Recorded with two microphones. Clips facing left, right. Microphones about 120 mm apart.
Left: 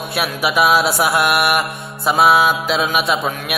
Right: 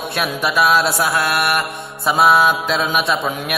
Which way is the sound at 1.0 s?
25° left (ahead or behind).